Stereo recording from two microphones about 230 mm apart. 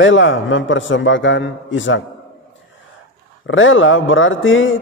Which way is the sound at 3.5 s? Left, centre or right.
Left.